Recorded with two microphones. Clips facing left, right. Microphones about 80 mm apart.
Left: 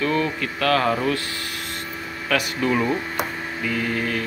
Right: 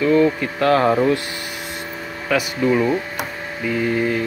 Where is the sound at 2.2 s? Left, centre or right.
Centre.